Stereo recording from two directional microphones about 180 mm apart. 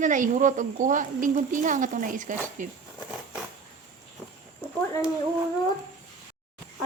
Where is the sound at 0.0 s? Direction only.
45° right (ahead or behind).